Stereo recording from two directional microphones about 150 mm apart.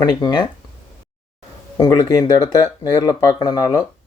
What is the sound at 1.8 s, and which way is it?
Speech, 25° left (ahead or behind).